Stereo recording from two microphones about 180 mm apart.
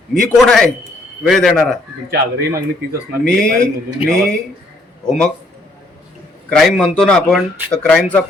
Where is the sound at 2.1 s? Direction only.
55° right (ahead or behind).